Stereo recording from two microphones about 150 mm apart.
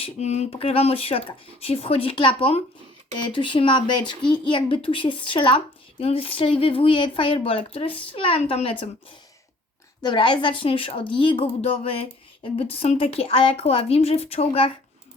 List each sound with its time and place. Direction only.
0.0 s a woman's voice: 50° left (ahead or behind)